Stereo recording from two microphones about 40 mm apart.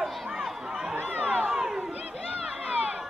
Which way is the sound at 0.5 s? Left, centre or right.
Centre.